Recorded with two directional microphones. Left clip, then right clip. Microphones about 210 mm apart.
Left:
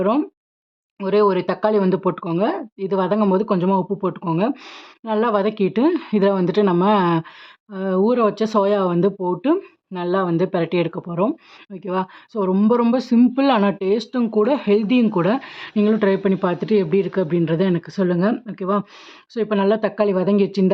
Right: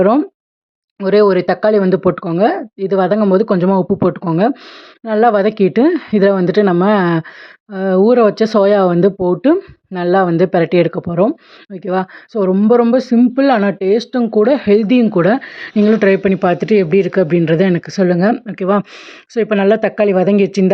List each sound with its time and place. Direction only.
0.0 s speech: 20° right (ahead or behind)